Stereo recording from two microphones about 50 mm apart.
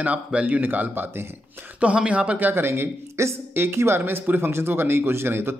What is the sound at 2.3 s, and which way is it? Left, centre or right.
Speech, right.